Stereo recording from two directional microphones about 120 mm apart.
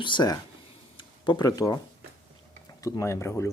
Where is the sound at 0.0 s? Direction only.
40° left (ahead or behind).